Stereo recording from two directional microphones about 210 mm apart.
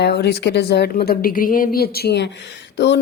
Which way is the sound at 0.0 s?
50° left (ahead or behind).